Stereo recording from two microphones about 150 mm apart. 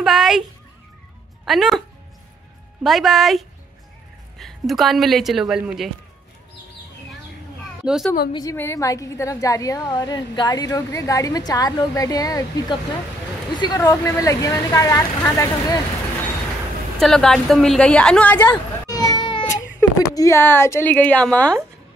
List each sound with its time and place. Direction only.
0.0 s a woman's voice: centre (ahead or behind)
2.8 s a woman's voice: centre (ahead or behind)
7.8 s speech: 5° right (ahead or behind)
8.3 s a woman's voice: 25° left (ahead or behind)
17.0 s a woman's voice: 5° left (ahead or behind)
18.9 s speech: 25° left (ahead or behind); by 21.5 s 5° left (ahead or behind)